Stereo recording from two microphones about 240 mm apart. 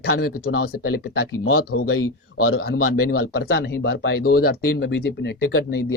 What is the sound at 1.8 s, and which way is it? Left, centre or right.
Speech, left.